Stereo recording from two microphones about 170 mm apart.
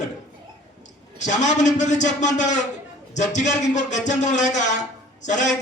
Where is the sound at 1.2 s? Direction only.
45° left (ahead or behind).